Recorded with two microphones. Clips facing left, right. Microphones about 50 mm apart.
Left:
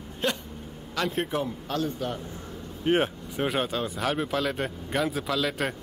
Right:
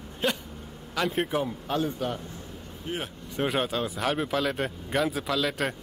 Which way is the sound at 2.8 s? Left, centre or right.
Left.